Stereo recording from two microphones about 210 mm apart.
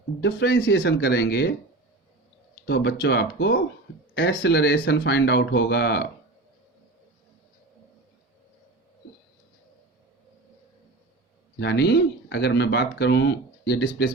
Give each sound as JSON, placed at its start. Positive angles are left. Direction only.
{"t": 0.2, "sound": "speech", "side_deg": 55}
{"t": 2.6, "sound": "speech", "side_deg": 50}
{"t": 11.6, "sound": "speech", "side_deg": 55}